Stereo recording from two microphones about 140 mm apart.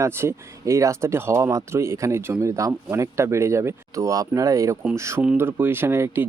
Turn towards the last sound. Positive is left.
turn(degrees=-20)  # may be behind; listen again after turning